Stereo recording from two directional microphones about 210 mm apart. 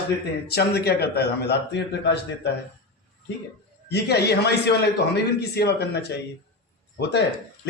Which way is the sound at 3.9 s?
50° left (ahead or behind).